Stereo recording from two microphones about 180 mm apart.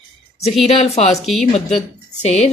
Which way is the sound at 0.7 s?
35° left (ahead or behind).